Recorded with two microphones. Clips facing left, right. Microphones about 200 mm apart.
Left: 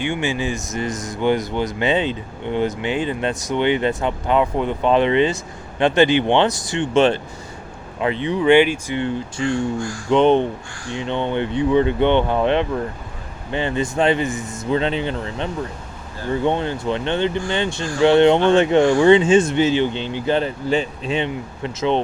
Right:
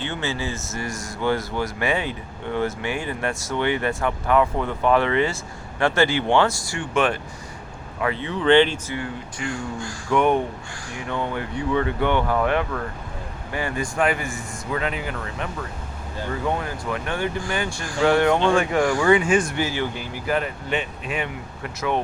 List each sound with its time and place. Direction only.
0.0 s speech: 15° left (ahead or behind)
9.0 s speech: 25° left (ahead or behind)